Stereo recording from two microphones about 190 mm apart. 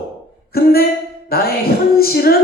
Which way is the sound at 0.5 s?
55° left (ahead or behind).